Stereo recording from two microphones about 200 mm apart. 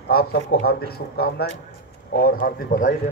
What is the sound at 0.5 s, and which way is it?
Speech, 55° left (ahead or behind).